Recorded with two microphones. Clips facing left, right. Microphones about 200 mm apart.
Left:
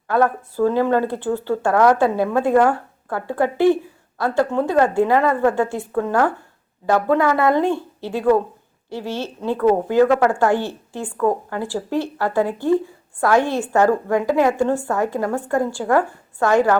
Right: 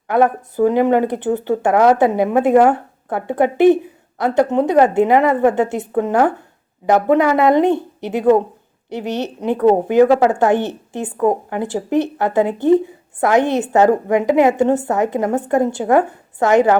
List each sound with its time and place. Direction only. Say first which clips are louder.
0.1 s a woman's voice: right 3 dB; 20° right (ahead or behind)